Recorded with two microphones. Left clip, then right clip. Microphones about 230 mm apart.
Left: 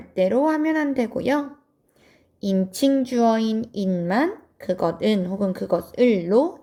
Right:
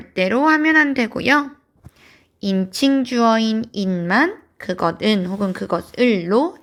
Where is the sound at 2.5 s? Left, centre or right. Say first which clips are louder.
Right 2 dB; centre.